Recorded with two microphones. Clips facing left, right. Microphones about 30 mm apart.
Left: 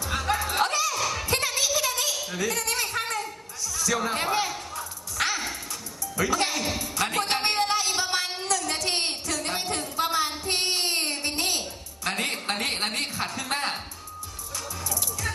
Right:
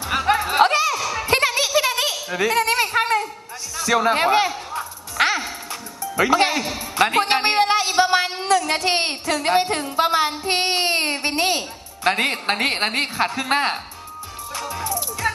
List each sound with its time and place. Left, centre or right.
0.0 s music: right
0.9 s a sound: right
1.3 s a sound: right
6.1 s a woman's voice: right
6.7 s music: right
12.0 s a woman's voice: right
14.5 s music: right